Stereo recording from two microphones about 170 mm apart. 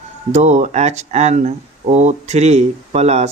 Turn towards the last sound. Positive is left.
turn(degrees=-40)  # may be behind; listen again after turning